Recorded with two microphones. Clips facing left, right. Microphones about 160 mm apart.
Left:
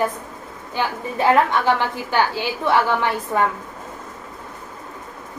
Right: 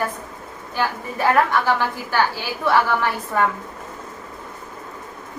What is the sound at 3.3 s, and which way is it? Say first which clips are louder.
Speech: even; 20° left (ahead or behind).